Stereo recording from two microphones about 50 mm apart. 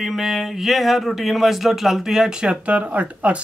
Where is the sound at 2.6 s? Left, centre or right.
Right.